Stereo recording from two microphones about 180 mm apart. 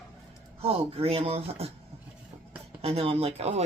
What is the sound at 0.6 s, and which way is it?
Speech, 35° right (ahead or behind).